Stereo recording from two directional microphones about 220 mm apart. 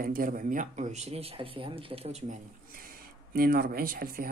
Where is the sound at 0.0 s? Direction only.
40° right (ahead or behind).